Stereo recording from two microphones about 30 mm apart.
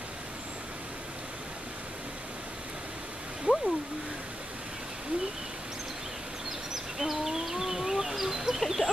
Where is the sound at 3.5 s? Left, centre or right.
Right.